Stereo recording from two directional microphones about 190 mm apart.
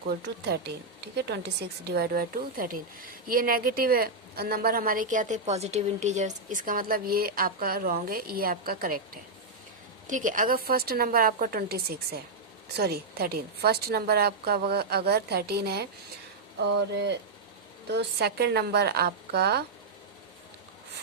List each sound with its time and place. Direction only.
1.0 s speech: 60° right (ahead or behind)
10.1 s a woman's voice: 45° right (ahead or behind)